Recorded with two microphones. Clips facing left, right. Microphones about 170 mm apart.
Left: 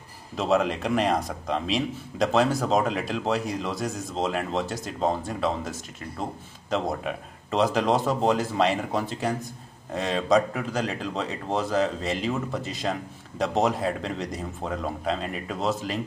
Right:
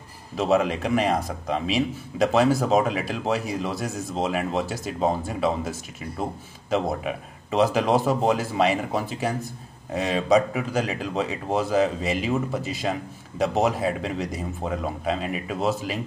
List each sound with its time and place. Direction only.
0.4 s a man's voice: 5° right (ahead or behind)